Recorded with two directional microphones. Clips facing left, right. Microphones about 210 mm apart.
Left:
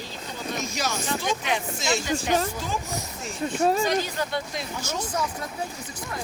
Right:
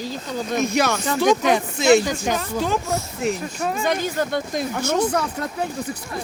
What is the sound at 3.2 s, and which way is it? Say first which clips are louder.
Speech: right 13 dB; 65° right (ahead or behind).